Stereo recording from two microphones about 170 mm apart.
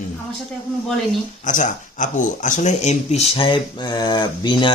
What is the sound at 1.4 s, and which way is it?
Speech, 50° left (ahead or behind).